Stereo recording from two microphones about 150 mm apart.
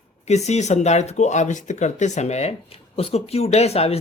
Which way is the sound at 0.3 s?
50° left (ahead or behind).